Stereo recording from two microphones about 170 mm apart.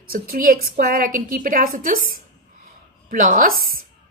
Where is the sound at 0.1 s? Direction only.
55° right (ahead or behind).